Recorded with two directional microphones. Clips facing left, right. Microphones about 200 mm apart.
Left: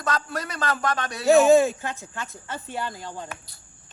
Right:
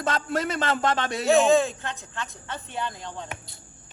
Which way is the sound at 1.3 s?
5° left (ahead or behind).